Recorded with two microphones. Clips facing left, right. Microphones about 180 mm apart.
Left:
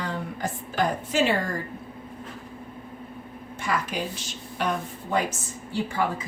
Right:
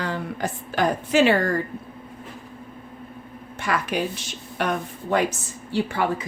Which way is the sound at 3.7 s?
75° right (ahead or behind).